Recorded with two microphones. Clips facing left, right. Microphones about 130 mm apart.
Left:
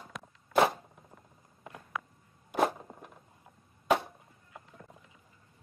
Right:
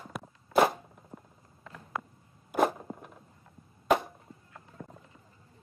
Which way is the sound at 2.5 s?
5° right (ahead or behind).